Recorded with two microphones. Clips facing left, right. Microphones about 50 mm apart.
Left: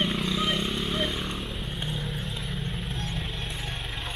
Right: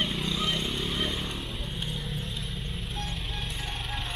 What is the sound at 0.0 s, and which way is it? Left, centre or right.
Vehicle, centre.